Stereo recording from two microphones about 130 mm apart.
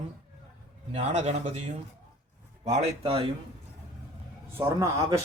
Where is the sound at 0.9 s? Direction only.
60° right (ahead or behind).